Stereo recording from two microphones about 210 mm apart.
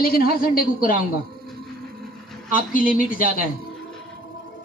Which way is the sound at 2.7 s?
40° left (ahead or behind).